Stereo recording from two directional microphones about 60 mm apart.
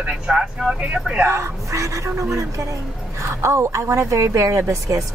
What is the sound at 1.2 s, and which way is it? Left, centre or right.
A woman's voice, right.